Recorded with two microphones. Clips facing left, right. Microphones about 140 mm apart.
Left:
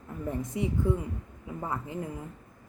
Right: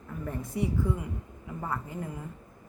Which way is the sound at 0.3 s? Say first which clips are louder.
Left 1 dB; 20° left (ahead or behind).